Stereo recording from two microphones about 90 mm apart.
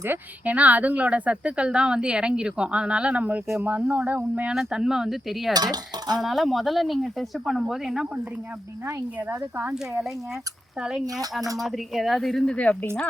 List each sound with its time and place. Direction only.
0.0 s speech: 20° right (ahead or behind)
4.5 s speech: 5° right (ahead or behind)
5.5 s speech: 45° right (ahead or behind)
6.2 s speech: centre (ahead or behind)
9.1 s speech: 15° right (ahead or behind)
10.8 s speech: 5° right (ahead or behind); by 12.9 s 15° left (ahead or behind)